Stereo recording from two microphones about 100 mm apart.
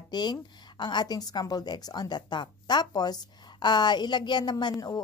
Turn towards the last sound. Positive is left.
turn(degrees=45)  # may be behind; listen again after turning